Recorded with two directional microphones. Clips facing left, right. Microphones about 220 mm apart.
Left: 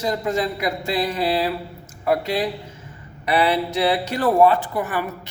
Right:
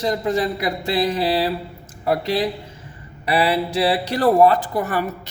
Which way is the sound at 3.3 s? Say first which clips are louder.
Even; 30° right (ahead or behind).